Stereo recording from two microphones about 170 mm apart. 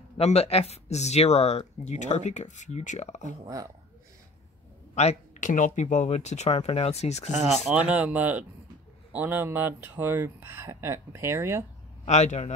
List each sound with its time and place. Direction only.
0.2 s speech: 35° left (ahead or behind)
4.9 s speech: 45° left (ahead or behind)
7.2 s speech: centre (ahead or behind)
12.1 s speech: 40° left (ahead or behind)